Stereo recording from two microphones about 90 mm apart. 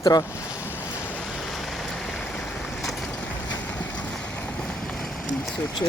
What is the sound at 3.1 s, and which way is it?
Vehicle, 15° left (ahead or behind).